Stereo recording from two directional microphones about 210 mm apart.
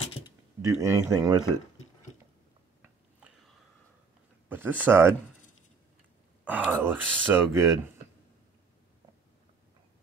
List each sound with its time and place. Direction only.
0.6 s speech: 15° right (ahead or behind)
2.8 s biting: 5° right (ahead or behind)
4.5 s speech: 10° right (ahead or behind)
6.4 s speech: 5° right (ahead or behind)